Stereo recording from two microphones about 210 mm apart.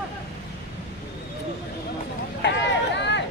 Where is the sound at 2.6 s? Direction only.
55° left (ahead or behind).